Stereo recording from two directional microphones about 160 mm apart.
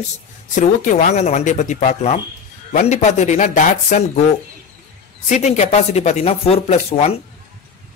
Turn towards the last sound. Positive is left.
turn(degrees=40)  # may be behind; listen again after turning